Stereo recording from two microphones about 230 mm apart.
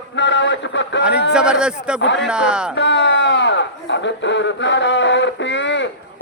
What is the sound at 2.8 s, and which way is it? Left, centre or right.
Speech, left.